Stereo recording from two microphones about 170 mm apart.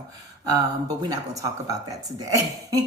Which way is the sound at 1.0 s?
20° right (ahead or behind).